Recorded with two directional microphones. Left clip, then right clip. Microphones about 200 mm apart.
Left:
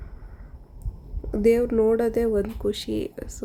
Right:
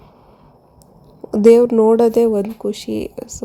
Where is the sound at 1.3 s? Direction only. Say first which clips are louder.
Right 10 dB; 20° right (ahead or behind).